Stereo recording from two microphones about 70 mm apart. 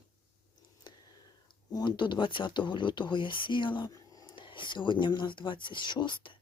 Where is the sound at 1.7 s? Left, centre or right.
Left.